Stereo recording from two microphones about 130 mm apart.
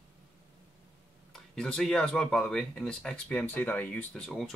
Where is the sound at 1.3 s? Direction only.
5° left (ahead or behind).